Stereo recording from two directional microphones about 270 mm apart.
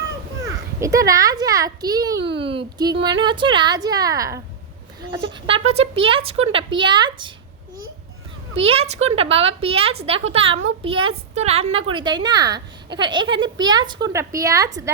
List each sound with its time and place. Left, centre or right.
0.4 s a child's voice: centre
8.5 s a woman's voice: right